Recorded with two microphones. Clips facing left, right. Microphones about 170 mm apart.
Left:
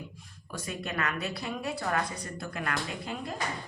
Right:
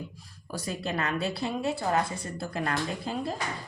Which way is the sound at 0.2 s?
35° right (ahead or behind).